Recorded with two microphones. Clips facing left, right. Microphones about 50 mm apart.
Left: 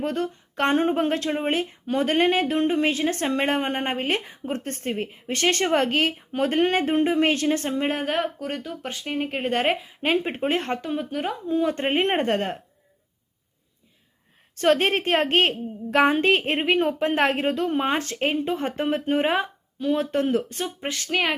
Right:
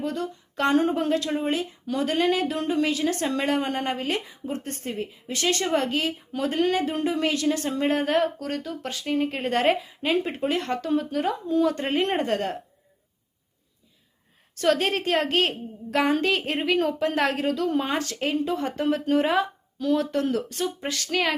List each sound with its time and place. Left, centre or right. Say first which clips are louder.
0.0 s speech: left 3 dB; left
7.7 s speech: right 2 dB; centre
10.0 s speech: left 1 dB; left
10.8 s speech: right 3 dB; left
14.6 s speech: left 2 dB; left